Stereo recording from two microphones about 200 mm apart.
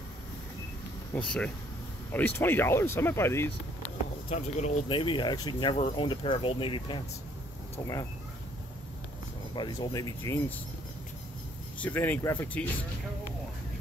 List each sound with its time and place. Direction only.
1.1 s speech: 5° left (ahead or behind)
4.3 s speech: 35° left (ahead or behind)
9.6 s speech: 20° left (ahead or behind)
11.8 s speech: 10° left (ahead or behind)